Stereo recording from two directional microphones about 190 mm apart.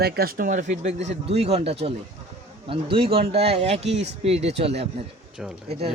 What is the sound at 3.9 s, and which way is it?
Speech, 65° right (ahead or behind).